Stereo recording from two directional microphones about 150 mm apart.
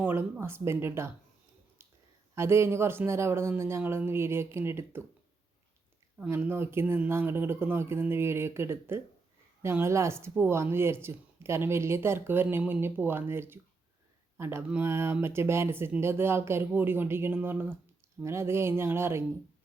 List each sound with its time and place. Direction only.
0.0 s speech: 15° right (ahead or behind)
2.3 s speech: 15° right (ahead or behind)
6.1 s speech: 10° right (ahead or behind)